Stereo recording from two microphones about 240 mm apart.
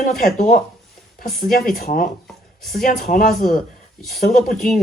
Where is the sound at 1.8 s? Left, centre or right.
Left.